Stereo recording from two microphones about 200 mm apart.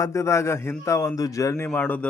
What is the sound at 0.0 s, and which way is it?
A man's voice, 15° left (ahead or behind).